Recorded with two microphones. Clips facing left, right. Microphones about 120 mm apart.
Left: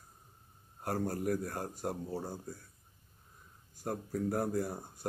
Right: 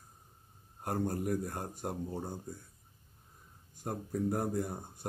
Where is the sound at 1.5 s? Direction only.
25° right (ahead or behind).